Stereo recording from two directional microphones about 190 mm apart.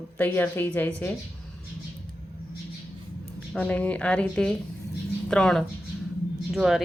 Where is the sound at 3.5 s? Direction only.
5° left (ahead or behind).